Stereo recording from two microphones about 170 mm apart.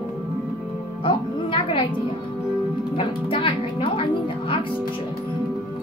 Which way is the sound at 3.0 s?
30° left (ahead or behind).